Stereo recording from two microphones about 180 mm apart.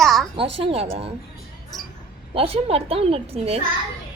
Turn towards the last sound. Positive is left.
turn(degrees=-35)  # may be behind; listen again after turning